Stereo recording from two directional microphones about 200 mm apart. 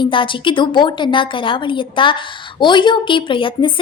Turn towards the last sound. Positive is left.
turn(degrees=25)  # may be behind; listen again after turning